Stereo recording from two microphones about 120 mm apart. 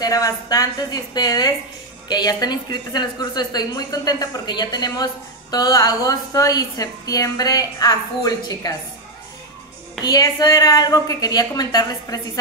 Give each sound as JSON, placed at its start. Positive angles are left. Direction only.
{"t": 0.0, "sound": "a woman's voice", "side_deg": 30}
{"t": 10.0, "sound": "a woman's voice", "side_deg": 30}